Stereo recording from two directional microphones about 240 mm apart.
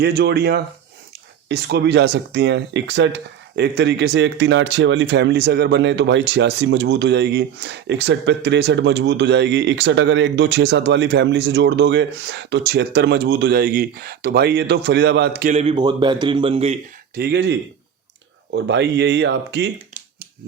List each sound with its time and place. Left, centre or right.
0.0 s speech: right
17.2 s speech: right